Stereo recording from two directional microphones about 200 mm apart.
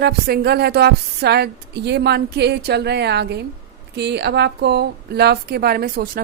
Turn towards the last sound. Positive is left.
turn(degrees=-50)  # may be behind; listen again after turning